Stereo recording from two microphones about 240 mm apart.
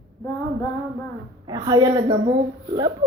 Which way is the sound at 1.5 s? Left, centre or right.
Centre.